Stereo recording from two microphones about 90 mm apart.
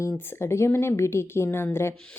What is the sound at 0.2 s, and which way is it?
A woman's voice, 25° left (ahead or behind).